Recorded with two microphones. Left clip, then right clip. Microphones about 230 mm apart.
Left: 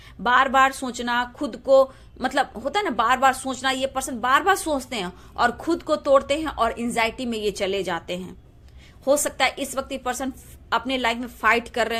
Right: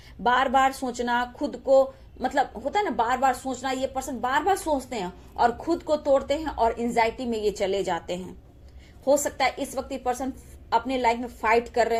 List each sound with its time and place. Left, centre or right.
0.2 s speech: left